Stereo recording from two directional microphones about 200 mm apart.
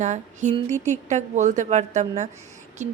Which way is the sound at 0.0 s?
35° right (ahead or behind).